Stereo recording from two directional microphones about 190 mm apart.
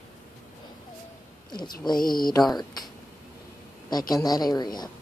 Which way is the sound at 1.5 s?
20° left (ahead or behind).